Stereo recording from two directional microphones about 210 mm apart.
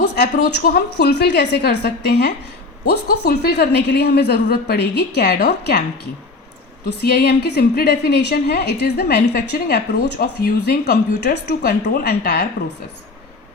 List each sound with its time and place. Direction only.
0.2 s a woman's voice: 50° left (ahead or behind)
6.8 s a woman's voice: 50° left (ahead or behind)